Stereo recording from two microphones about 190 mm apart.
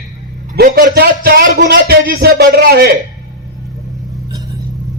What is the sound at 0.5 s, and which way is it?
A man's voice, 50° right (ahead or behind).